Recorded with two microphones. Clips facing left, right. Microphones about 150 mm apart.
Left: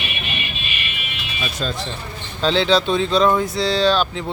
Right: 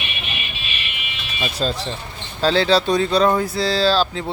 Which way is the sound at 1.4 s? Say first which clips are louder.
Right 3 dB; 35° right (ahead or behind).